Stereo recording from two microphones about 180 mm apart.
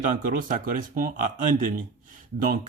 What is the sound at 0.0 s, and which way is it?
Speech, 50° right (ahead or behind).